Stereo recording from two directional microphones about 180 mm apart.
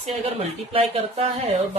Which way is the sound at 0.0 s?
35° right (ahead or behind).